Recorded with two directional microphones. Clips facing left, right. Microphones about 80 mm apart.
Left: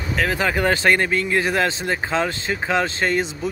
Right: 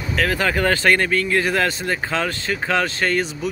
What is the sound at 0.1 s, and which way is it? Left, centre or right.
Speech, left.